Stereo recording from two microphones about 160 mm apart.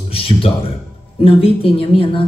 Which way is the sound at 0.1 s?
35° left (ahead or behind).